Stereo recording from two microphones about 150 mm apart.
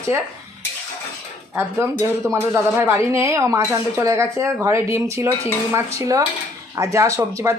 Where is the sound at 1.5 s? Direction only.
15° right (ahead or behind).